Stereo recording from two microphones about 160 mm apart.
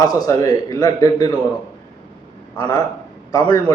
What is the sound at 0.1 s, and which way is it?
A man's voice, 20° left (ahead or behind).